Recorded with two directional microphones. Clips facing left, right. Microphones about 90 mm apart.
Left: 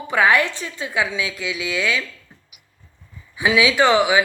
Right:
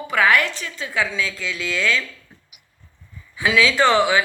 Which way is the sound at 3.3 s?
15° left (ahead or behind).